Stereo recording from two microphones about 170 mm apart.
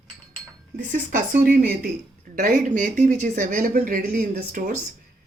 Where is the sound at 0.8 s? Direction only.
50° right (ahead or behind).